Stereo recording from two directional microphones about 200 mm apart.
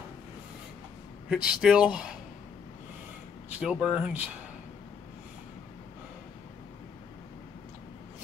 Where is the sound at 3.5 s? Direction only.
5° right (ahead or behind).